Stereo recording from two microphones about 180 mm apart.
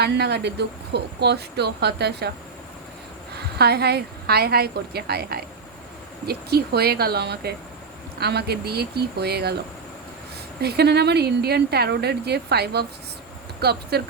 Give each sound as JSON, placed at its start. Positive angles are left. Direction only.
{"t": 0.0, "sound": "speech", "side_deg": -65}
{"t": 3.6, "sound": "a woman's voice", "side_deg": -65}
{"t": 10.6, "sound": "a woman's voice", "side_deg": -65}